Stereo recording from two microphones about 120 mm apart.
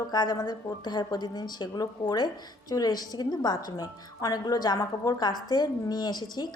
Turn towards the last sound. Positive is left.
turn(degrees=35)  # may be behind; listen again after turning